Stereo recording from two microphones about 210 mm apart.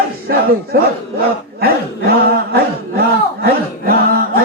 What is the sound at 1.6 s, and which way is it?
Chant, 45° right (ahead or behind).